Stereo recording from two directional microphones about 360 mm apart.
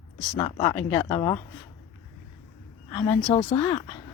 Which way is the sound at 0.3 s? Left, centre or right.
Centre.